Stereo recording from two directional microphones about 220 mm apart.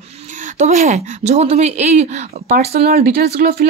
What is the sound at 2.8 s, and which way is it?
Speech, 45° right (ahead or behind).